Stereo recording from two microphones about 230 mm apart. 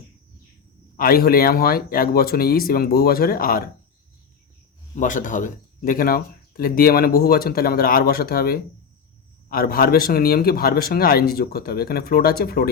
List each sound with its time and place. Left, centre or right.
0.9 s speech: left
4.9 s speech: left